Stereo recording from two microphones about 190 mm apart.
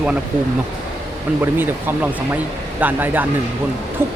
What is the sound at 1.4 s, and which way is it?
Speech, 10° right (ahead or behind).